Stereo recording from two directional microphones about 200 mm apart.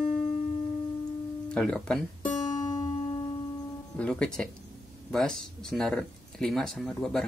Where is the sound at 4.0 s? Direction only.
5° left (ahead or behind).